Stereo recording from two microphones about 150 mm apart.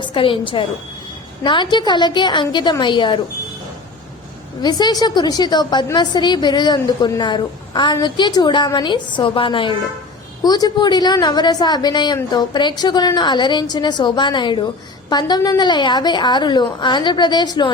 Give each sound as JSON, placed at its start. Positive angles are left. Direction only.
{"t": 0.0, "sound": "a woman's voice", "side_deg": 35}
{"t": 4.6, "sound": "a woman's voice", "side_deg": 25}